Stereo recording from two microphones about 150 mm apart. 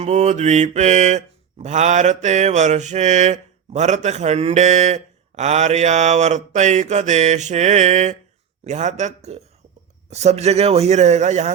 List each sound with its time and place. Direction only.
0.0 s mantra: 50° right (ahead or behind)